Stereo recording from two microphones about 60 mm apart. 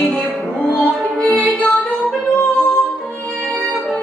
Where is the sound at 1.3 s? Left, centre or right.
Centre.